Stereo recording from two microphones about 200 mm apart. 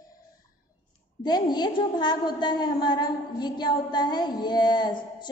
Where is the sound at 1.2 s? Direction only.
20° left (ahead or behind).